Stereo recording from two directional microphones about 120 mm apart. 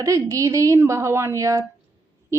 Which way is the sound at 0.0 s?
25° right (ahead or behind).